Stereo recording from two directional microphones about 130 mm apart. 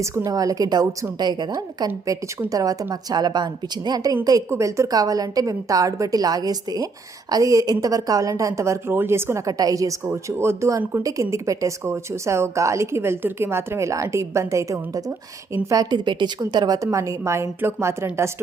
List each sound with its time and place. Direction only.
0.0 s a woman's voice: 20° right (ahead or behind)